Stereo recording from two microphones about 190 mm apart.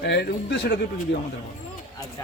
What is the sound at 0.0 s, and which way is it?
Speech, 60° left (ahead or behind).